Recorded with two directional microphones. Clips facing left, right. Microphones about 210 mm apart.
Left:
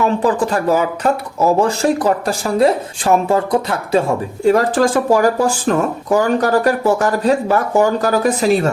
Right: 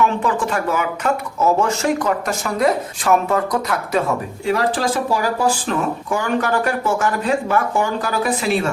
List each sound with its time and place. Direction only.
0.0 s speech: 35° left (ahead or behind)
4.4 s speech: 45° left (ahead or behind)